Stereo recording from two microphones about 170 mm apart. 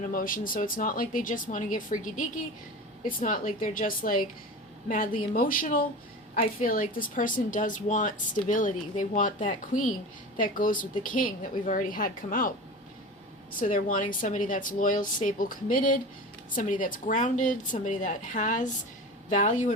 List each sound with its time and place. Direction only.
0.1 s speech: 55° left (ahead or behind)
13.6 s speech: 50° left (ahead or behind)